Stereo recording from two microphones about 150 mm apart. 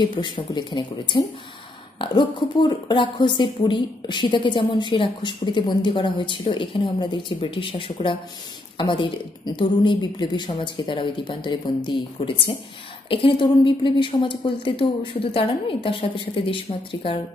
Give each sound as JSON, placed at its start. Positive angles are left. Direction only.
{"t": 0.1, "sound": "a woman's voice", "side_deg": 30}